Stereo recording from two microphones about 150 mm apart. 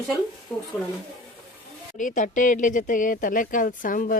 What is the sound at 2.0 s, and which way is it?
Speech, 60° left (ahead or behind).